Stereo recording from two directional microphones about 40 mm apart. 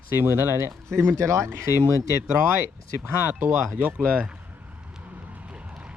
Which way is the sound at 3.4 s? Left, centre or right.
Right.